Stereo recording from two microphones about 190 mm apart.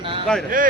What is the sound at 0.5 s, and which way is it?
Speech, 45° right (ahead or behind).